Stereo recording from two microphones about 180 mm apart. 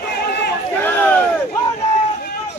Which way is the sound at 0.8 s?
10° left (ahead or behind).